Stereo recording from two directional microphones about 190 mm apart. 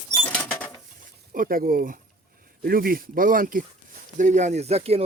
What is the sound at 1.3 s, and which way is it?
Speech, 50° right (ahead or behind).